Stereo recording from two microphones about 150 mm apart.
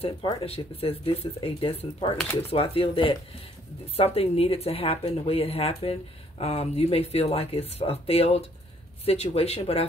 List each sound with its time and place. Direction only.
0.0 s a woman's voice: 40° left (ahead or behind)